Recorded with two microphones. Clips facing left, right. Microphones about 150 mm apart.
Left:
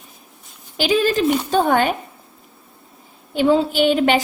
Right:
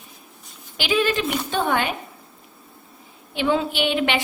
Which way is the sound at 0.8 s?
40° left (ahead or behind).